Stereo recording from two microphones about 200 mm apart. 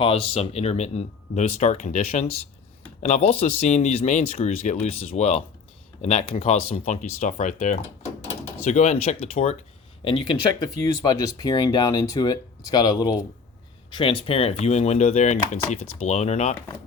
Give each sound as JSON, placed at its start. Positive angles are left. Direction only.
{"t": 0.0, "sound": "speech", "side_deg": 30}